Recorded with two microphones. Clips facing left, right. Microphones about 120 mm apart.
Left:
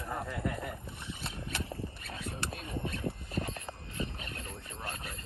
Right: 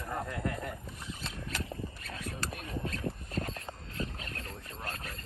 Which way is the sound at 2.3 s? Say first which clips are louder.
Even; 25° left (ahead or behind).